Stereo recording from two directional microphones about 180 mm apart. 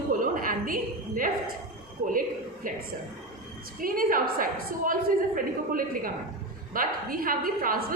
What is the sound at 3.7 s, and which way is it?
A woman's voice, 50° right (ahead or behind).